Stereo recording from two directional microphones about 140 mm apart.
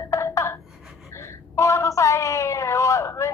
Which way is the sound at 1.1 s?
20° left (ahead or behind).